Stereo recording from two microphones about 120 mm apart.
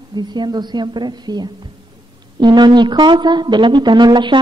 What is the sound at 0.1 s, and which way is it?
Speech, 35° right (ahead or behind).